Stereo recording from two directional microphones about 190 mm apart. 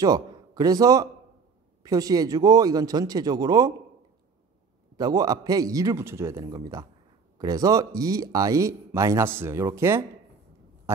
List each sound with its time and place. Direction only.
0.0 s a man's voice: 20° right (ahead or behind)
4.9 s speech: 20° right (ahead or behind)